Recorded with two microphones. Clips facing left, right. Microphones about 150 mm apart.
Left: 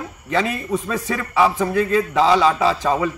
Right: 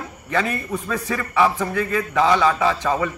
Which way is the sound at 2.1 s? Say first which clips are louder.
Right 1 dB; 30° left (ahead or behind).